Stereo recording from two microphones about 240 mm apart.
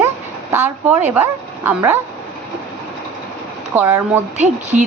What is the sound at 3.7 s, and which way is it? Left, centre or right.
Speech, centre.